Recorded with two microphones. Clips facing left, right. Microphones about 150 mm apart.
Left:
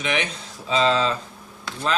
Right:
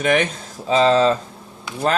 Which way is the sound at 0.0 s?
50° right (ahead or behind).